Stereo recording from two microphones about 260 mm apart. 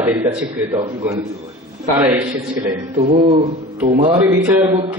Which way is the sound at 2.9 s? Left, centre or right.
Right.